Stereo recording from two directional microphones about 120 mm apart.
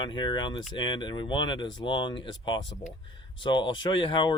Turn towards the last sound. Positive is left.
turn(degrees=45)  # may be behind; listen again after turning